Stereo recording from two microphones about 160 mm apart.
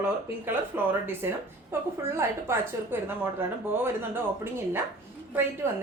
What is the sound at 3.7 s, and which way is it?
A woman's voice, 15° right (ahead or behind).